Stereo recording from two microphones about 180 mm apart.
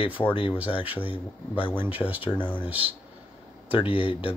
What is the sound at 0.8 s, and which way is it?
Speech, 10° right (ahead or behind).